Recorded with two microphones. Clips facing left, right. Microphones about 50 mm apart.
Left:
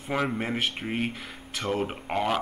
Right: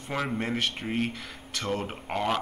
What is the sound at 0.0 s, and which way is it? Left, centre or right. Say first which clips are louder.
Speech: left 2 dB; centre.